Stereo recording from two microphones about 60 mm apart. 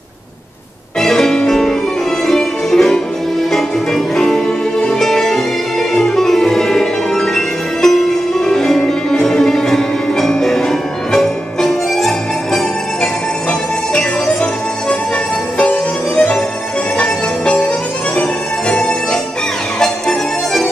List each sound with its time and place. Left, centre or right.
1.0 s music: centre
13.5 s music: centre
19.8 s music: centre